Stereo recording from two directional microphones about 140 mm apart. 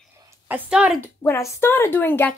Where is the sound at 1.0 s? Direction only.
20° left (ahead or behind).